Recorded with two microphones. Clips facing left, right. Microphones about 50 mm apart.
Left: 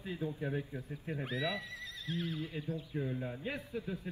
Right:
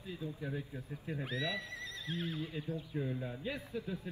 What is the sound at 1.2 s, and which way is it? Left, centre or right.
Speech, centre.